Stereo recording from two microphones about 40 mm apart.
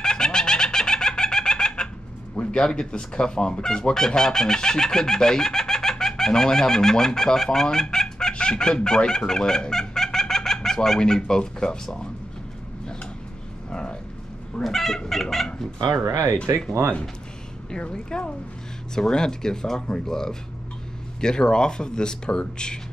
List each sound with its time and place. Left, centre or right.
0.0 s chicken: centre
2.4 s fowl: left
8.4 s speech: left
13.7 s vehicle: left
14.6 s speech: centre
15.0 s cat: centre
17.6 s speech: centre